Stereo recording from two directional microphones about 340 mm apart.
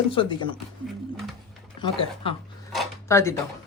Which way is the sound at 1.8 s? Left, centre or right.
Centre.